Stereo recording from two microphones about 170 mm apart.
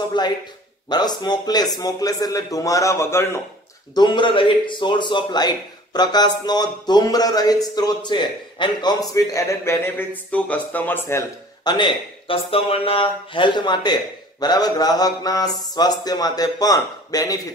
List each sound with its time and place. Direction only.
0.2 s a man's voice: 25° left (ahead or behind)
3.9 s a man's voice: 25° left (ahead or behind)
11.6 s a man's voice: 25° left (ahead or behind)